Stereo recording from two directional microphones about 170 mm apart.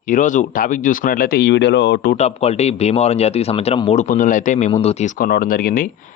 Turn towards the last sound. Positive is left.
turn(degrees=55)  # may be behind; listen again after turning